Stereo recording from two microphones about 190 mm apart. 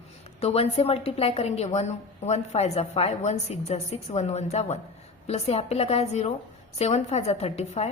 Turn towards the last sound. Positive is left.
turn(degrees=35)  # may be behind; listen again after turning